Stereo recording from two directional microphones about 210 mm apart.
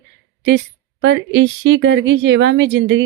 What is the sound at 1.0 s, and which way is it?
Speech, 55° right (ahead or behind).